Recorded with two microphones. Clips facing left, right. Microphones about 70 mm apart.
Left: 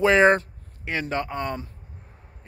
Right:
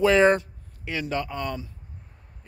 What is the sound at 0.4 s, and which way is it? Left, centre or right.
Speech, left.